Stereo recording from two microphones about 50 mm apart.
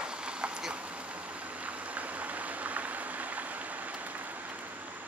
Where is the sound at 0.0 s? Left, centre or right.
Centre; by 4.7 s right.